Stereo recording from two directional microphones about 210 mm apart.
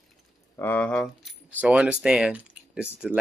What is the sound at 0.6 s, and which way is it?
Speech, 5° left (ahead or behind).